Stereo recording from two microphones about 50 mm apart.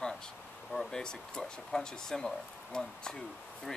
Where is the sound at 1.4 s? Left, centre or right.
Centre.